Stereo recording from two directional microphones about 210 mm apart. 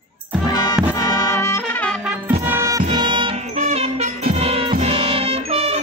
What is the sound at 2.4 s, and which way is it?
Music, 15° right (ahead or behind).